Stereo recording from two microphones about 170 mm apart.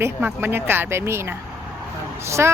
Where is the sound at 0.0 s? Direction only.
15° right (ahead or behind).